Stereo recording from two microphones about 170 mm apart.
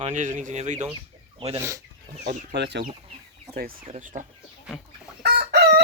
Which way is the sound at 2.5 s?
85° right.